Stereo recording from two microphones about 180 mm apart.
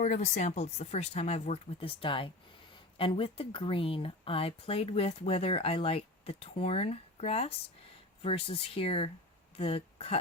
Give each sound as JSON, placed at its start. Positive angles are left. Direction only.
{"t": 0.0, "sound": "speech", "side_deg": 40}